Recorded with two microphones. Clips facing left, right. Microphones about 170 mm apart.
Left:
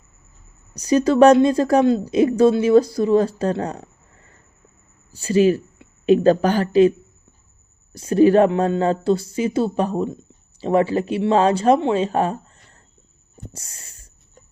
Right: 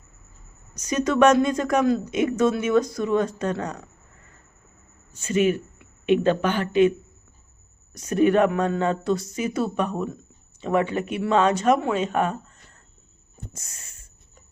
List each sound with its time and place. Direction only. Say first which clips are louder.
0.7 s speech: left 7 dB; 35° left (ahead or behind)
5.1 s speech: left 5 dB; 35° left (ahead or behind)
7.9 s speech: left 5 dB; 30° left (ahead or behind)
13.3 s a sound: left 3 dB; 30° left (ahead or behind)